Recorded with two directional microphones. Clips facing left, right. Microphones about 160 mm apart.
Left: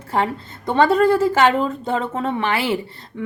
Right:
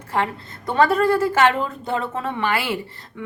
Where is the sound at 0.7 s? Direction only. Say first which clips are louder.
Left 2 dB; 25° left (ahead or behind).